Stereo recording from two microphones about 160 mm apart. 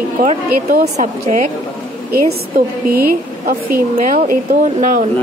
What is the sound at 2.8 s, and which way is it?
A woman's voice, 65° right (ahead or behind).